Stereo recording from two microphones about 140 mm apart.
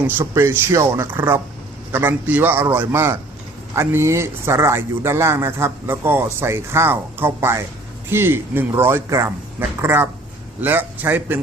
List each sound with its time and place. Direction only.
0.0 s speech: 15° right (ahead or behind)